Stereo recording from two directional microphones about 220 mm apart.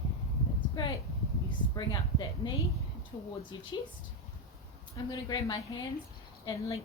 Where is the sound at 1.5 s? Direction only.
20° left (ahead or behind).